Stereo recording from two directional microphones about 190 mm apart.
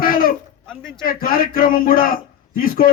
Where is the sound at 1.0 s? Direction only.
50° left (ahead or behind).